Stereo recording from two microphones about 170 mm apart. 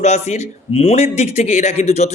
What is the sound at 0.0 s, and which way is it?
Speech, 40° left (ahead or behind).